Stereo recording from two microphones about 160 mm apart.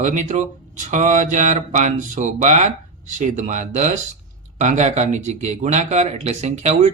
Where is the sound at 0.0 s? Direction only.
45° right (ahead or behind).